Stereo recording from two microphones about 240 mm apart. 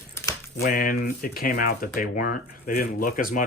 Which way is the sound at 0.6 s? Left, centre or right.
Left.